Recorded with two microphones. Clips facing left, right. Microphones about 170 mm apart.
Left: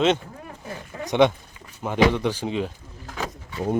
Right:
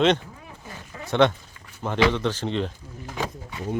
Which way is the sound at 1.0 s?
15° left (ahead or behind).